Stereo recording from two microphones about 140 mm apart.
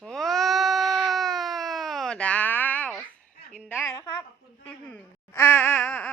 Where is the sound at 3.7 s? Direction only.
20° left (ahead or behind).